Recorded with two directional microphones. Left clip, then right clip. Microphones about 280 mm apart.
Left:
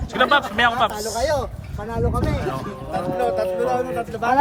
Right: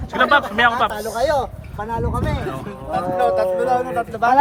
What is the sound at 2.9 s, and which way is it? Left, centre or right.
Speech, centre.